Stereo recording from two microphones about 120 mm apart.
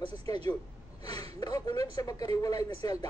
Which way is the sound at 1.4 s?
35° left (ahead or behind).